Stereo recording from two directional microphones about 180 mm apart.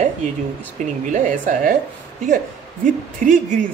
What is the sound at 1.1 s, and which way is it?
Speech, 45° right (ahead or behind).